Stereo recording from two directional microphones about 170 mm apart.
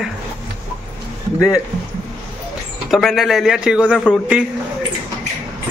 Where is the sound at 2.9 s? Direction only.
Centre (ahead or behind).